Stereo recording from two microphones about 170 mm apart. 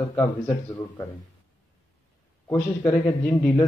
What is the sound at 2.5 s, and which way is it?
A man's voice, 10° left (ahead or behind).